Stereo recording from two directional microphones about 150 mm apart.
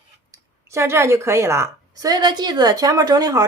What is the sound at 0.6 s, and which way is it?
A woman's voice, 20° right (ahead or behind).